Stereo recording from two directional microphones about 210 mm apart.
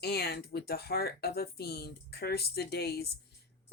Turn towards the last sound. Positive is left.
turn(degrees=50)  # may be behind; listen again after turning